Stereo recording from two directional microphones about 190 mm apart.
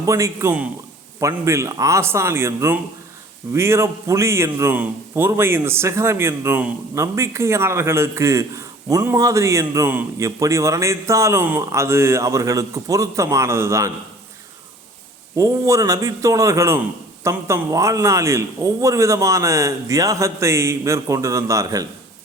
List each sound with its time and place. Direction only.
0.0 s a man's voice: 15° right (ahead or behind)
15.4 s a man's voice: 15° right (ahead or behind)